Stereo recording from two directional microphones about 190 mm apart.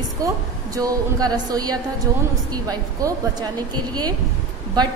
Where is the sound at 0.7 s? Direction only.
20° right (ahead or behind).